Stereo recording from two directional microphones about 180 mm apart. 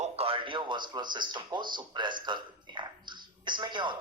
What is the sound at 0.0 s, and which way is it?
Speech, 35° right (ahead or behind).